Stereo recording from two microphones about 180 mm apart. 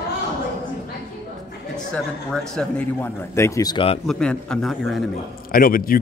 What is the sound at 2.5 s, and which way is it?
A man's voice, 15° left (ahead or behind).